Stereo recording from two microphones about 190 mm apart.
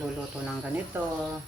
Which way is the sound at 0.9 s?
10° right (ahead or behind).